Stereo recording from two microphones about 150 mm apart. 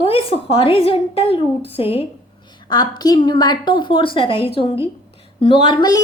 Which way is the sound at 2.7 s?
30° left (ahead or behind).